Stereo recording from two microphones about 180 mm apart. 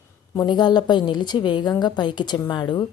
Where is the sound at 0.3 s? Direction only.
25° left (ahead or behind).